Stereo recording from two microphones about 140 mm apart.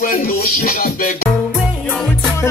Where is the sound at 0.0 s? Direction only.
90° left.